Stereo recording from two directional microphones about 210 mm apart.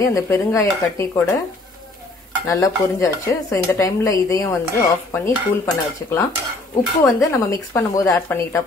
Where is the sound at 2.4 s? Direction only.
15° left (ahead or behind).